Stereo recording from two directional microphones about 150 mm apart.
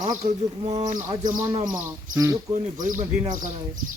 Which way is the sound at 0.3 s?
45° right (ahead or behind).